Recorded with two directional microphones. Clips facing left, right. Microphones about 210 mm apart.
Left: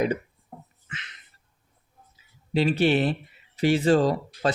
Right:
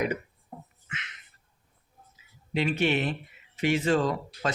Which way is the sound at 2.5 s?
35° left (ahead or behind).